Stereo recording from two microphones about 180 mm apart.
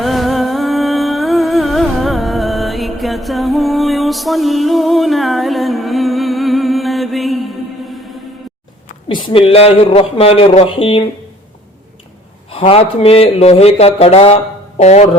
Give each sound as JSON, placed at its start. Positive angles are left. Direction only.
{"t": 0.0, "sound": "music", "side_deg": 0}
{"t": 9.0, "sound": "speech", "side_deg": 30}
{"t": 12.5, "sound": "speech", "side_deg": 30}